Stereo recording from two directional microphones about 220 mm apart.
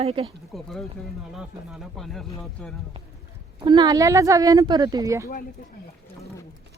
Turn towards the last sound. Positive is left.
turn(degrees=-15)  # may be behind; listen again after turning